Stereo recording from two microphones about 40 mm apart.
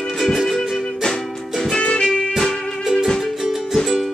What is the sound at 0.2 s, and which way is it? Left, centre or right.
Music, centre.